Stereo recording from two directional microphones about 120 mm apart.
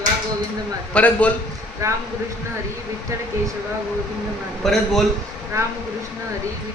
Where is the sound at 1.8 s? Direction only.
25° right (ahead or behind).